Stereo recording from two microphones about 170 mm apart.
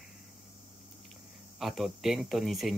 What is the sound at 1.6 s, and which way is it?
Speech, centre (ahead or behind).